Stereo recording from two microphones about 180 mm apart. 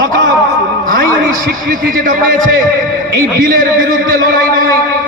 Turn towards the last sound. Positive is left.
turn(degrees=-50)  # may be behind; listen again after turning